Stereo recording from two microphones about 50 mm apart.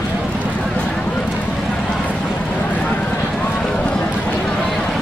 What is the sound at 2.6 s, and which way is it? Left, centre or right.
Run, left.